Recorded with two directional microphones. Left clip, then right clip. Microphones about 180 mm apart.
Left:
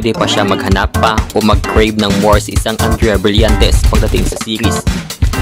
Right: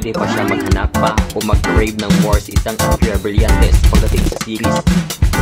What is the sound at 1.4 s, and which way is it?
Speech, 45° left (ahead or behind).